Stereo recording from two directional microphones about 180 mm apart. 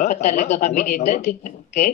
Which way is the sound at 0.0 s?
40° left (ahead or behind).